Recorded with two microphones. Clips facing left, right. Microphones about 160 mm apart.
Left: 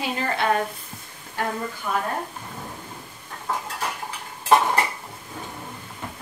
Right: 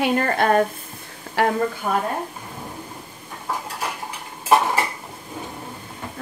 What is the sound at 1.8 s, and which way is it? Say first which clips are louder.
Speech: right 1 dB; 50° right (ahead or behind).